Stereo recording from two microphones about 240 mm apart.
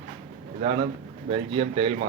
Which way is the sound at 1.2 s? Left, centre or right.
Right.